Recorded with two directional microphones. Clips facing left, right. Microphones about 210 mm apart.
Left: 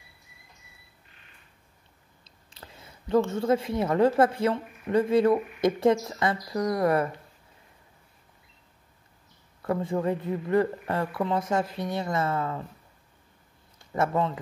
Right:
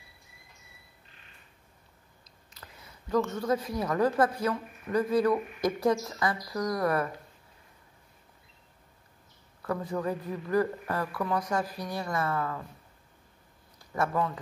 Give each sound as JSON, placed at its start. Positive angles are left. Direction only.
{"t": 2.2, "sound": "speech", "side_deg": 30}
{"t": 9.6, "sound": "speech", "side_deg": 25}
{"t": 13.7, "sound": "a man's voice", "side_deg": 25}